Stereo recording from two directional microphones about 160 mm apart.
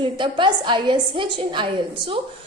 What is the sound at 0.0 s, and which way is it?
A woman's voice, 30° right (ahead or behind).